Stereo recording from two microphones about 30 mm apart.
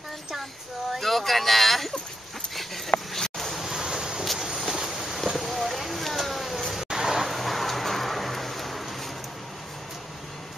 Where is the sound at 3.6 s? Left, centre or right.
Centre.